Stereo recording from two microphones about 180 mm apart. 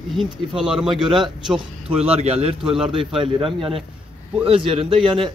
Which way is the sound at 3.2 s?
30° right (ahead or behind).